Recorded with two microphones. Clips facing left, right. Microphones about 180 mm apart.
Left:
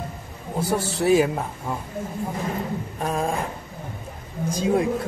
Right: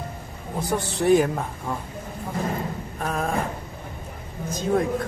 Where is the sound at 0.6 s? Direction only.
5° left (ahead or behind).